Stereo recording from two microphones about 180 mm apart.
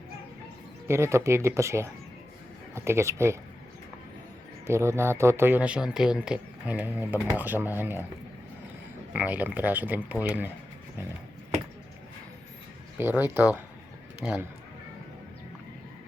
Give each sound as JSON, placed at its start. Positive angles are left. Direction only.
{"t": 0.9, "sound": "speech", "side_deg": -15}
{"t": 4.6, "sound": "speech", "side_deg": -15}
{"t": 9.1, "sound": "speech", "side_deg": -10}
{"t": 13.0, "sound": "speech", "side_deg": -10}